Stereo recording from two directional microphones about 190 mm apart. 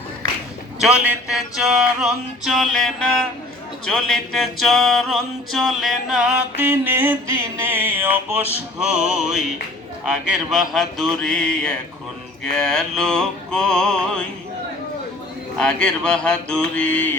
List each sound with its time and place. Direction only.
0.8 s music: 5° right (ahead or behind)
15.5 s music: 5° left (ahead or behind)